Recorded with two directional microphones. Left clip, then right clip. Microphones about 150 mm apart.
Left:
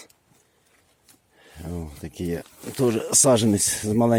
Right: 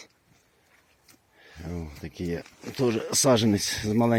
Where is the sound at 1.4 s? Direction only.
20° left (ahead or behind).